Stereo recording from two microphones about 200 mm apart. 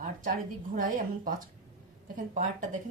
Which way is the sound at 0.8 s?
45° right (ahead or behind).